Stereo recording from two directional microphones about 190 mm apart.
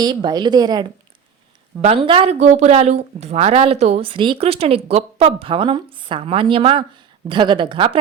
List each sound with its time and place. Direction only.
0.0 s a woman's voice: 20° right (ahead or behind)